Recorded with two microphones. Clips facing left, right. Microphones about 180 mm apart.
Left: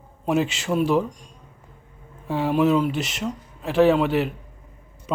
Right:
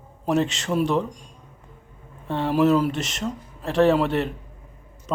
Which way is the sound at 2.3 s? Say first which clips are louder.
Even; 5° left (ahead or behind).